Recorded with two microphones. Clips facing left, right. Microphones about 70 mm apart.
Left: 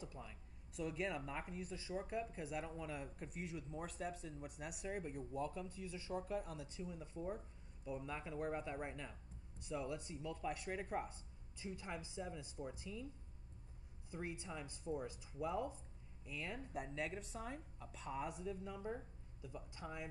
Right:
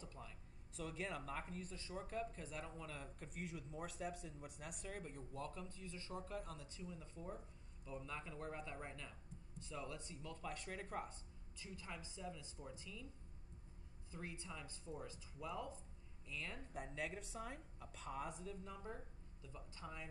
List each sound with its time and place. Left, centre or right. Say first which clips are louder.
0.0 s a sound: left 3 dB; centre
1.2 s speech: left 1 dB; centre
3.3 s a woman's voice: left 2 dB; centre; by 13.0 s left
14.1 s speech: left 5 dB; centre
16.7 s a woman's voice: left 2 dB; centre